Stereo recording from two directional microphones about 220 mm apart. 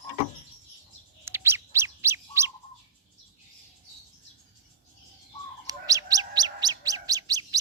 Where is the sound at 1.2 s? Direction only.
10° right (ahead or behind).